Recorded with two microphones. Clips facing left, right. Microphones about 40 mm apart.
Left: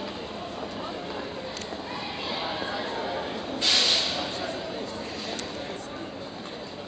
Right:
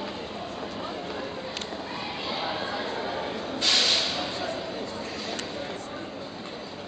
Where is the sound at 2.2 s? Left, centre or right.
Centre.